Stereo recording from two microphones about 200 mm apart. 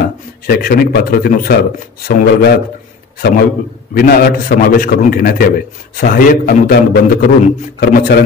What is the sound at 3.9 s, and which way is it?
A man's voice, 50° left (ahead or behind).